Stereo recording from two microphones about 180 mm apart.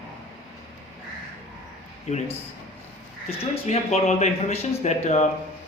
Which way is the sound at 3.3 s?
35° left (ahead or behind).